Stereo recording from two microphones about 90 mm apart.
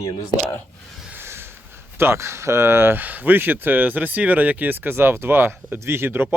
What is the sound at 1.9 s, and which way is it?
Speech, 30° right (ahead or behind).